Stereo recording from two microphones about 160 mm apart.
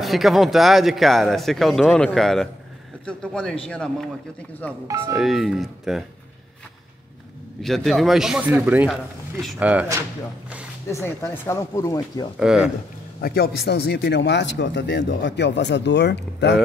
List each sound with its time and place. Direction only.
0.0 s speech: centre (ahead or behind)
4.8 s speech: 15° right (ahead or behind)
5.1 s speech: centre (ahead or behind)
7.6 s speech: centre (ahead or behind)
10.9 s speech: 15° left (ahead or behind)
12.4 s speech: 5° right (ahead or behind)
13.2 s speech: 75° left (ahead or behind); by 16.6 s 90° left